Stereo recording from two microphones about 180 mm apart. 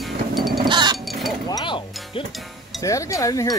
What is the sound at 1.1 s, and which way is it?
Chink, centre (ahead or behind).